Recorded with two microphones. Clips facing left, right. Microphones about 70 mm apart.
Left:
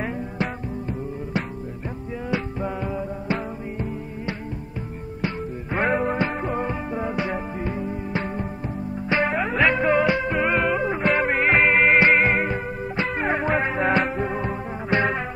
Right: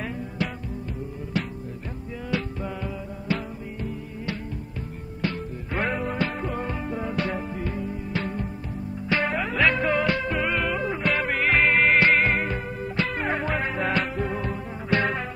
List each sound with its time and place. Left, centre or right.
0.4 s music: left
5.2 s music: left